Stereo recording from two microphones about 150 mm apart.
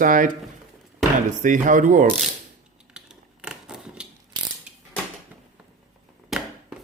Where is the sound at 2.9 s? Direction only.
5° right (ahead or behind).